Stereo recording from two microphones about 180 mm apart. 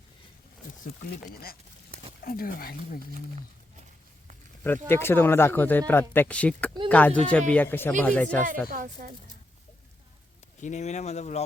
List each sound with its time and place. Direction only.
2.2 s speech: 55° left (ahead or behind)
4.6 s speech: 10° left (ahead or behind)
8.7 s speech: 50° right (ahead or behind)
10.6 s speech: 40° left (ahead or behind)